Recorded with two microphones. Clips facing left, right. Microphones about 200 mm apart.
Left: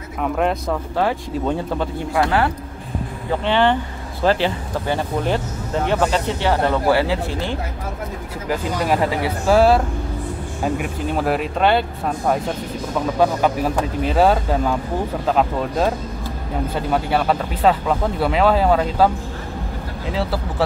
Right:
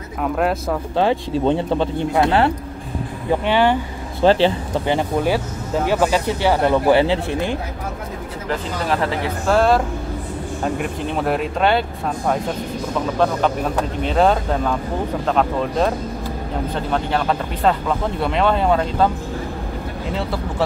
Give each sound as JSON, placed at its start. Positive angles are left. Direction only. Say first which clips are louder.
{"t": 0.2, "sound": "speech", "louder": "even", "side_deg": -5}
{"t": 0.9, "sound": "speech", "louder": "right 4 dB", "side_deg": -25}
{"t": 3.3, "sound": "speech", "louder": "right 1 dB", "side_deg": -10}
{"t": 4.2, "sound": "speech", "louder": "right 4 dB", "side_deg": -25}
{"t": 4.9, "sound": "speech", "louder": "right 2 dB", "side_deg": -10}
{"t": 8.5, "sound": "speech", "louder": "left 2 dB", "side_deg": 10}
{"t": 13.2, "sound": "speech", "louder": "left 1 dB", "side_deg": 10}
{"t": 20.2, "sound": "speech", "louder": "left 2 dB", "side_deg": 0}